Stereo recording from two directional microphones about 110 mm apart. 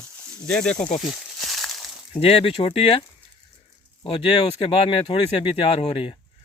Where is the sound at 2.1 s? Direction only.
65° left (ahead or behind).